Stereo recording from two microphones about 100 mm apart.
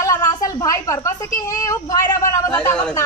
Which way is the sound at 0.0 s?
35° left (ahead or behind).